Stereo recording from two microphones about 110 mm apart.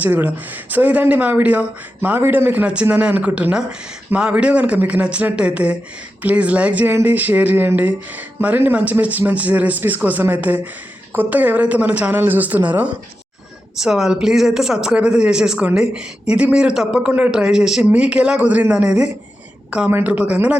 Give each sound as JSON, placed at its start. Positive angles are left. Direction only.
{"t": 0.0, "sound": "speech", "side_deg": -15}